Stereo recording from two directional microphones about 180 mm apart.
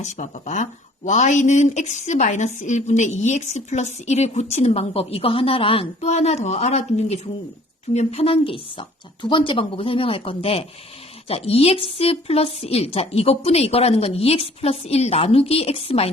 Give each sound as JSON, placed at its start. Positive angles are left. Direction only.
{"t": 0.0, "sound": "speech", "side_deg": 40}